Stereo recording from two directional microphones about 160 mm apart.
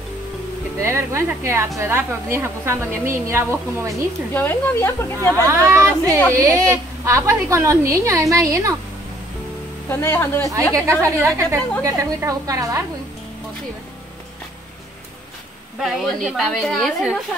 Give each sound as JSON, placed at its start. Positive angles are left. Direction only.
{"t": 0.7, "sound": "a woman's voice", "side_deg": -15}
{"t": 4.3, "sound": "speech", "side_deg": 15}
{"t": 5.3, "sound": "a woman's voice", "side_deg": -15}
{"t": 9.8, "sound": "speech", "side_deg": 15}
{"t": 10.4, "sound": "a woman's voice", "side_deg": -20}
{"t": 15.8, "sound": "a woman's voice", "side_deg": 0}